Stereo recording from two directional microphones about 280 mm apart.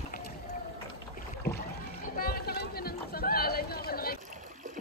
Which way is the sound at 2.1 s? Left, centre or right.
Left.